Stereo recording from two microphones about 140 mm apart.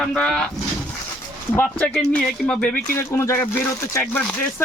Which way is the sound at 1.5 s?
10° left (ahead or behind).